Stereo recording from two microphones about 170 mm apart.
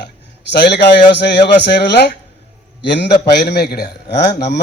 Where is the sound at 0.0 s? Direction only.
80° left.